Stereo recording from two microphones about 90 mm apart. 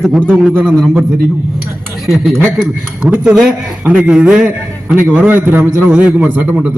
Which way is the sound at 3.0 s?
20° right (ahead or behind).